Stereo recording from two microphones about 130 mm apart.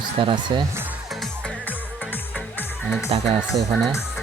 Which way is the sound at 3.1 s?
45° right (ahead or behind).